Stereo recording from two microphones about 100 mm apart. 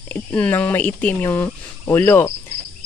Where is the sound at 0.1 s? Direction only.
15° left (ahead or behind).